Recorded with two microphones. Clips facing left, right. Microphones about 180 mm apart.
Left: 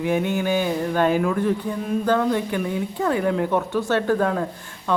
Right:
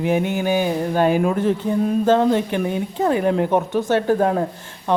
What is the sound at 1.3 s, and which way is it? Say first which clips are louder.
Speech: right 3 dB; 25° right (ahead or behind).